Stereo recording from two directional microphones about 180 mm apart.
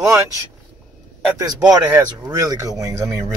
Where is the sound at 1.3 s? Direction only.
20° right (ahead or behind).